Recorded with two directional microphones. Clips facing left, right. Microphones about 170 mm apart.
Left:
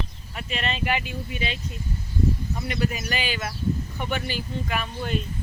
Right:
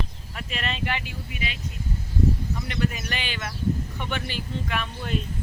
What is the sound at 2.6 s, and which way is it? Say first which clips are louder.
Speech: left 1 dB; 10° left (ahead or behind).